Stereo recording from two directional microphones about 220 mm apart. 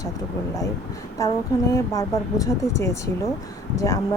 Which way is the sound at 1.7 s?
15° left (ahead or behind).